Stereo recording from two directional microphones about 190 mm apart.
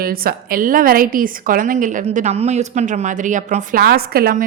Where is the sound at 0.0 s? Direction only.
50° right (ahead or behind).